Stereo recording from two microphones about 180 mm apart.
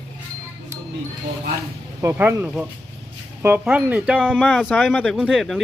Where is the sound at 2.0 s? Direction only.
15° right (ahead or behind).